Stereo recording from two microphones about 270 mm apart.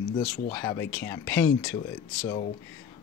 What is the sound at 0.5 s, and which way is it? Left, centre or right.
Speech, centre.